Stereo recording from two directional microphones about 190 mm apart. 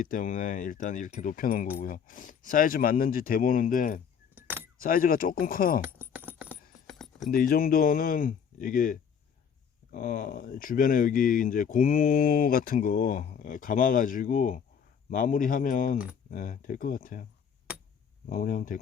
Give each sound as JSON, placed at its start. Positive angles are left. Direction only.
{"t": 0.0, "sound": "speech", "side_deg": 45}
{"t": 4.4, "sound": "keys jangling", "side_deg": -10}
{"t": 4.8, "sound": "speech", "side_deg": 50}
{"t": 5.8, "sound": "a sound", "side_deg": -10}
{"t": 6.8, "sound": "keys jangling", "side_deg": 0}
{"t": 7.3, "sound": "speech", "side_deg": 50}
{"t": 18.3, "sound": "speech", "side_deg": 45}